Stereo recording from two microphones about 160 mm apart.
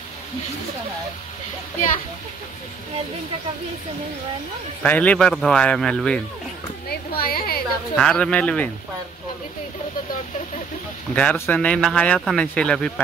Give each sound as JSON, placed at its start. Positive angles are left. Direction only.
{"t": 4.8, "sound": "speech", "side_deg": 10}
{"t": 6.9, "sound": "speech", "side_deg": 70}
{"t": 7.9, "sound": "speech", "side_deg": 5}
{"t": 11.1, "sound": "speech", "side_deg": 10}